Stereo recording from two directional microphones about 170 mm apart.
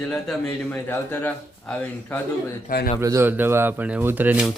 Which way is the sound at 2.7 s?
50° left (ahead or behind).